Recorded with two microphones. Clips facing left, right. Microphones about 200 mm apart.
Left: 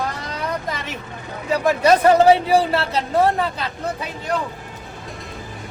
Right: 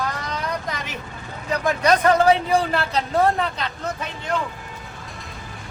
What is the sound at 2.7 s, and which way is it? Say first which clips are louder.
Speech: left 2 dB; centre (ahead or behind).